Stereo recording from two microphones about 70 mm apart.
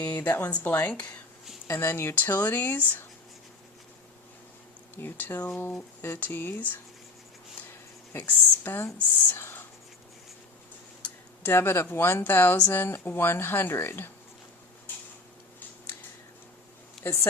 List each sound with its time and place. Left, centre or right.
0.0 s speech: left
1.6 s speech: left
4.9 s speech: left
8.3 s speech: left
9.2 s whispering: left
11.4 s speech: left
17.0 s speech: left